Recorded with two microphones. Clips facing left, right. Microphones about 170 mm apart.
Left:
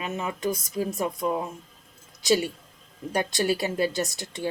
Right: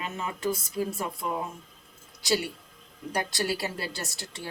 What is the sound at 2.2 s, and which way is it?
Speech, 20° left (ahead or behind).